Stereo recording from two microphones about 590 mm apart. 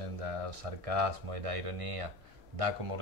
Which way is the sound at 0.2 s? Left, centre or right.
Right.